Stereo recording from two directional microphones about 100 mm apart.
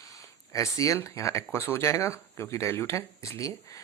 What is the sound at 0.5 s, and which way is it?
Speech, 35° left (ahead or behind).